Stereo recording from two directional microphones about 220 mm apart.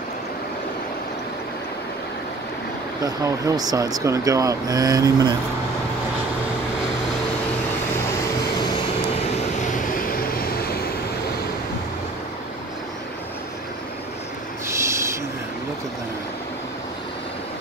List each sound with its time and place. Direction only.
3.0 s speech: 15° right (ahead or behind)
9.3 s vehicle: 30° left (ahead or behind)
14.7 s owl: 10° right (ahead or behind)